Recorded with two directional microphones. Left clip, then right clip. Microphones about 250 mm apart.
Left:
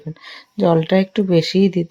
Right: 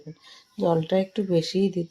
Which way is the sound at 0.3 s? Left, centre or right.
Left.